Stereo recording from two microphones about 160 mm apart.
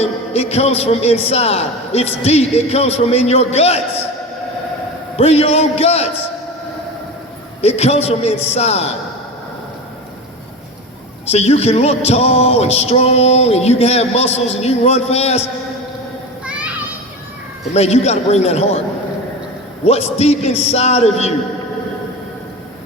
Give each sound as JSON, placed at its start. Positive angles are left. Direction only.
{"t": 0.0, "sound": "music", "side_deg": 40}
{"t": 5.1, "sound": "music", "side_deg": 40}
{"t": 7.6, "sound": "music", "side_deg": 40}
{"t": 11.3, "sound": "music", "side_deg": 40}
{"t": 16.5, "sound": "children playing", "side_deg": -10}
{"t": 17.7, "sound": "music", "side_deg": 45}
{"t": 19.8, "sound": "music", "side_deg": 40}